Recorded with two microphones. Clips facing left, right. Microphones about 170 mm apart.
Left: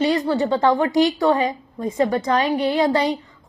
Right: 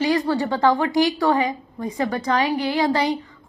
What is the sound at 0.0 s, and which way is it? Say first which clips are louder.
A woman's voice: left 1 dB; 20° left (ahead or behind).